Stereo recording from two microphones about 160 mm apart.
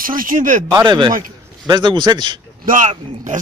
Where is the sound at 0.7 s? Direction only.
25° right (ahead or behind).